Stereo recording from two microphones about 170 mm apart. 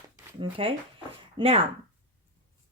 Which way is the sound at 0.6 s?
30° right (ahead or behind).